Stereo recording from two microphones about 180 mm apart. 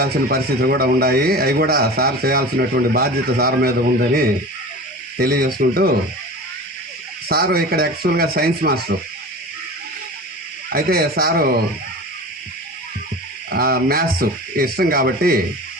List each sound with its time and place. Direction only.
0.0 s a man's voice: 60° right (ahead or behind)
7.3 s a man's voice: 60° right (ahead or behind)
10.7 s a man's voice: 55° right (ahead or behind)
13.5 s a man's voice: 60° right (ahead or behind)